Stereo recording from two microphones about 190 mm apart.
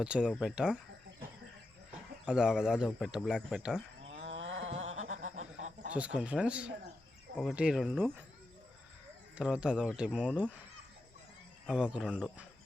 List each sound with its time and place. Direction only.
0.0 s speech: 5° right (ahead or behind)
2.2 s speech: 5° right (ahead or behind)
4.2 s wild animals: 75° right (ahead or behind)
4.9 s a sound: 35° right (ahead or behind)
5.9 s speech: 5° right (ahead or behind)
9.4 s speech: 5° right (ahead or behind)
11.6 s speech: 5° right (ahead or behind)